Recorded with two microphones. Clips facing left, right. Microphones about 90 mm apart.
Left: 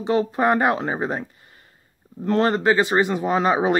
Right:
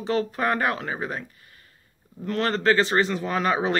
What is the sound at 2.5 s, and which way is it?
Speech, 15° left (ahead or behind).